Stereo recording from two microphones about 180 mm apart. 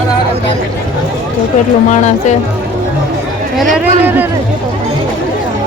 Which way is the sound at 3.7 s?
10° right (ahead or behind).